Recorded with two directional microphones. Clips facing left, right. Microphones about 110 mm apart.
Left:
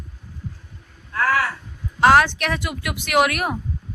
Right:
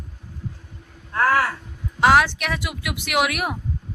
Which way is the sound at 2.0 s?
5° right (ahead or behind).